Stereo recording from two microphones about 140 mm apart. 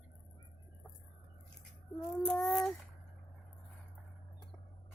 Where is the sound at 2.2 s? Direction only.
5° left (ahead or behind).